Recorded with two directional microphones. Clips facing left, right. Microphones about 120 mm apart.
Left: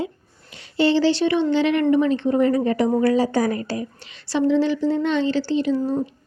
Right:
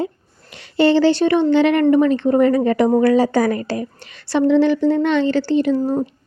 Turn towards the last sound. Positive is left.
turn(degrees=-55)  # may be behind; listen again after turning